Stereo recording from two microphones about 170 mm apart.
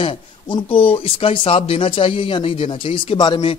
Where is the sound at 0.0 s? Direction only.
30° left (ahead or behind).